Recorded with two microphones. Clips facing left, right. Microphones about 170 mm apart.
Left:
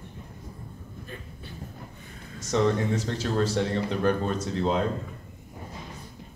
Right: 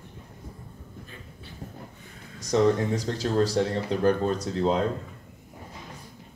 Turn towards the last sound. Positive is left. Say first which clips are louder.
# right 1 dB
turn(degrees=-35)  # may be behind; listen again after turning